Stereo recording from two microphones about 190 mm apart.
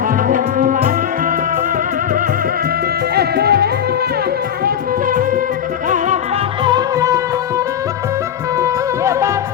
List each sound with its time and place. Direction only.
0.3 s music: 45° right (ahead or behind)
3.2 s music: 55° right (ahead or behind)
6.7 s music: 20° right (ahead or behind)
8.5 s music: 15° right (ahead or behind)